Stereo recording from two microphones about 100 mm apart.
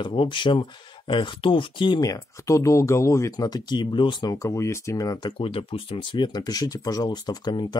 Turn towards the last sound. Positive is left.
turn(degrees=45)  # may be behind; listen again after turning